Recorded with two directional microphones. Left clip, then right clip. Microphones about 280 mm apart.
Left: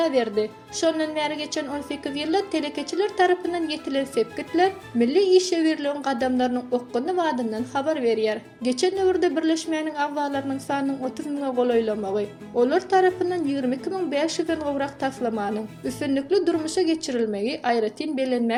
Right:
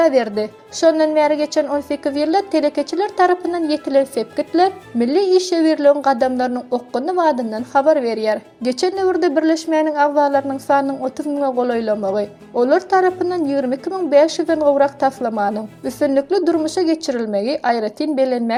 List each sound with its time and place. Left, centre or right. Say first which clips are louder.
0.0 s speech: right 7 dB; right